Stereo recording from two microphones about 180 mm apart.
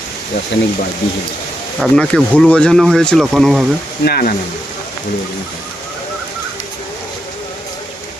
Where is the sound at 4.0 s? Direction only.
55° left (ahead or behind).